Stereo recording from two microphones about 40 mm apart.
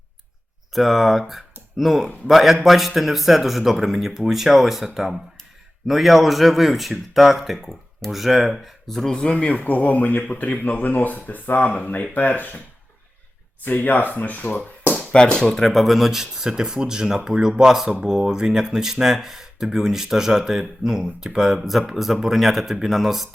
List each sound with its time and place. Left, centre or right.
0.7 s speech: centre
8.6 s speech: centre
9.1 s speech: left
13.7 s speech: left
15.1 s speech: left
15.5 s speech: centre